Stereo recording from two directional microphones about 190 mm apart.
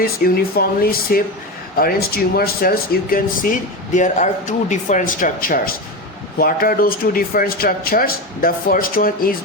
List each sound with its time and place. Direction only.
0.0 s speech: 50° left (ahead or behind)